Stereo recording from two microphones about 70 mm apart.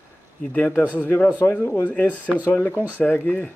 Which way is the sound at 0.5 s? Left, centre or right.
Left.